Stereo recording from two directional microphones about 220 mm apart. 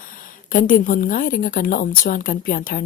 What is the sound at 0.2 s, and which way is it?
A woman's voice, 40° left (ahead or behind).